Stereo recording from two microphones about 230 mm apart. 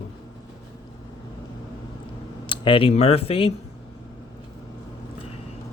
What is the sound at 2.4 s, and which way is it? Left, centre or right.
Speech, left.